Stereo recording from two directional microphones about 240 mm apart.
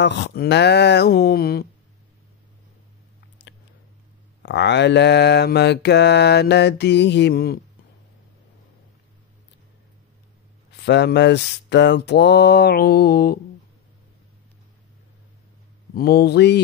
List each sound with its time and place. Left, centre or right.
0.0 s speech: left
4.4 s mantra: left
10.9 s mantra: left
15.9 s mantra: left